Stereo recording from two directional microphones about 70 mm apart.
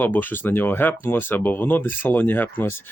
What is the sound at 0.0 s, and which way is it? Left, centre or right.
Speech, left.